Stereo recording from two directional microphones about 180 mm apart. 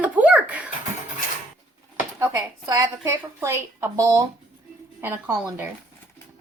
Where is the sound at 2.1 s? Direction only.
15° right (ahead or behind).